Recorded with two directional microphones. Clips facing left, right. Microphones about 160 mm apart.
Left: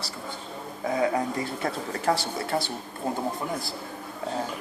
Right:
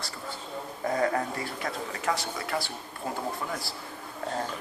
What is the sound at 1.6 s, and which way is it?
Speech, 35° left (ahead or behind).